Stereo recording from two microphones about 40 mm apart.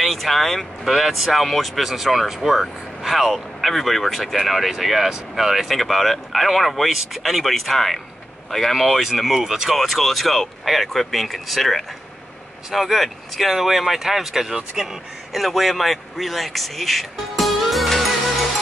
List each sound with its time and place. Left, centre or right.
0.0 s speech: centre
0.8 s speech: centre
9.8 s speech: centre